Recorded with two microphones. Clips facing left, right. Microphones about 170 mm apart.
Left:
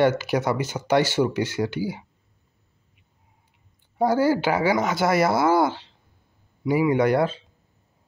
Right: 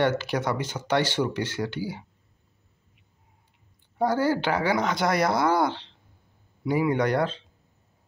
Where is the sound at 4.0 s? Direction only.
10° left (ahead or behind).